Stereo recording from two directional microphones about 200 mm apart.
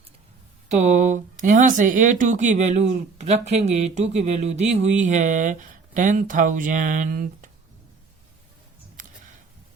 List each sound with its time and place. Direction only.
0.7 s speech: 35° right (ahead or behind)